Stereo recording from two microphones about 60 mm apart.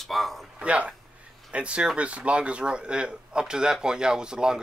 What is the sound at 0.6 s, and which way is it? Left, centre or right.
Speech, centre.